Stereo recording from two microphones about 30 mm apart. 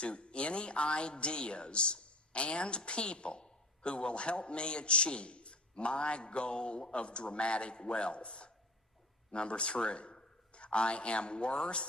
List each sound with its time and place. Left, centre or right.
0.0 s a woman's voice: left